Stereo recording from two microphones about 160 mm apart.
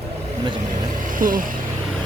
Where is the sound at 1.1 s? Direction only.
60° right (ahead or behind).